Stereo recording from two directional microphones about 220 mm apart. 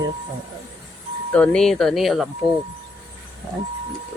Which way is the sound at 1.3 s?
5° left (ahead or behind).